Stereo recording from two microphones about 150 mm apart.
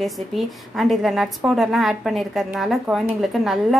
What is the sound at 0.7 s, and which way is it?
A woman's voice, centre (ahead or behind).